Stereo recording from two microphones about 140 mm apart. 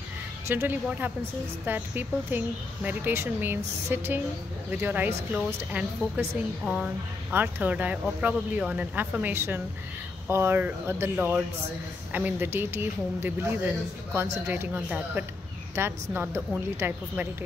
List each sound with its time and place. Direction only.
0.5 s speech: 15° right (ahead or behind)